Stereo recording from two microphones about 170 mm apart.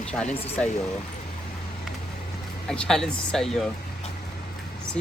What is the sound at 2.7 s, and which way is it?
Speech, 5° left (ahead or behind).